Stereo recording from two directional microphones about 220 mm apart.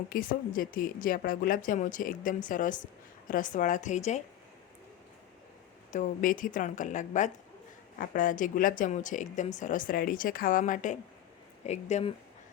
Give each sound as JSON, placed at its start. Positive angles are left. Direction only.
{"t": 0.1, "sound": "speech", "side_deg": 40}
{"t": 5.9, "sound": "speech", "side_deg": 35}